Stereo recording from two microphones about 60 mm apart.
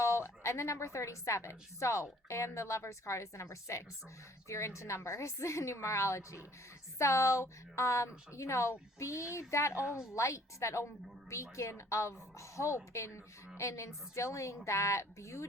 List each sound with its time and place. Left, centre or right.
0.0 s a woman's voice: left